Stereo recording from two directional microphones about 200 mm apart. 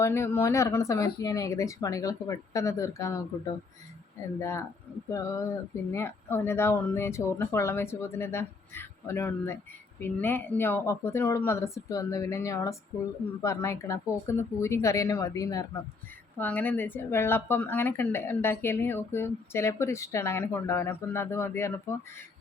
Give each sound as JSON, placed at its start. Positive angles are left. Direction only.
{"t": 0.0, "sound": "speech", "side_deg": 10}
{"t": 4.4, "sound": "speech", "side_deg": 15}